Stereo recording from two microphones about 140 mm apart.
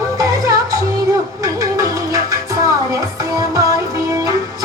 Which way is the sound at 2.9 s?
25° right (ahead or behind).